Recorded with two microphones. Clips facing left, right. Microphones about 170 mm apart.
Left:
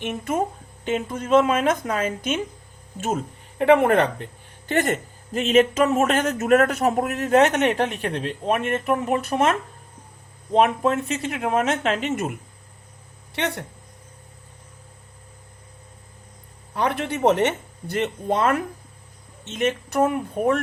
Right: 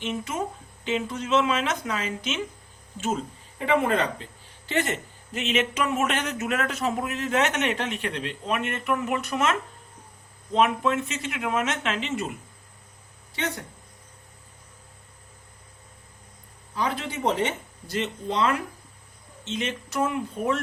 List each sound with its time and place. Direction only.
0.0 s speech: 55° left (ahead or behind)
3.2 s speech: 65° left (ahead or behind); by 9.4 s 35° left (ahead or behind)
10.5 s speech: 40° left (ahead or behind)
13.3 s speech: 70° left (ahead or behind)
16.7 s speech: 65° left (ahead or behind)